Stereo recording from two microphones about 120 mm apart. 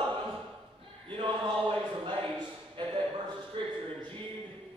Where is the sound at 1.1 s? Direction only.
45° right (ahead or behind).